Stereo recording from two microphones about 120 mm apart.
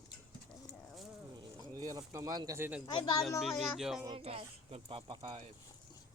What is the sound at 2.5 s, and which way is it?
Speech, 15° right (ahead or behind).